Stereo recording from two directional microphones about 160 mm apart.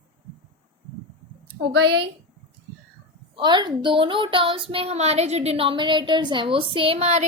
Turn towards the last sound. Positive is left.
turn(degrees=-40)  # may be behind; listen again after turning